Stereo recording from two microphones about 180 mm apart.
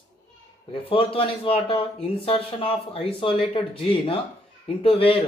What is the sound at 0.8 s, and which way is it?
Speech, 30° left (ahead or behind).